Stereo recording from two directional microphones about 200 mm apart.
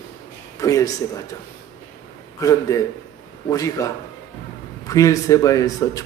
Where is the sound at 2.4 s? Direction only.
15° left (ahead or behind).